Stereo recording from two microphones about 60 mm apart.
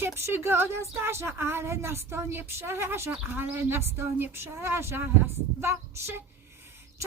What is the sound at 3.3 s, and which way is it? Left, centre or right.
Speech, right.